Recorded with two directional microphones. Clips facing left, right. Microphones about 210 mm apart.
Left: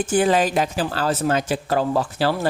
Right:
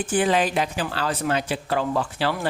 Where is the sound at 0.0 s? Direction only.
45° left (ahead or behind).